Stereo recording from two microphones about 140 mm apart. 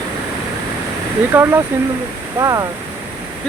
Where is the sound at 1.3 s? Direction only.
15° right (ahead or behind).